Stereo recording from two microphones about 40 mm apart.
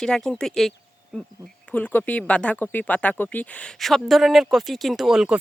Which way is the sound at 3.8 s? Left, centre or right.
Centre.